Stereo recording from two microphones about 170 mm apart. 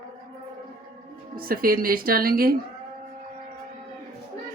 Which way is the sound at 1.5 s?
60° right (ahead or behind).